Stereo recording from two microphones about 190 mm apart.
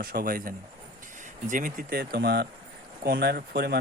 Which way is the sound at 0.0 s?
50° right (ahead or behind).